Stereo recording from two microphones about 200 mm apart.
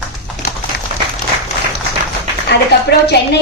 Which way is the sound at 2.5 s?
55° left (ahead or behind).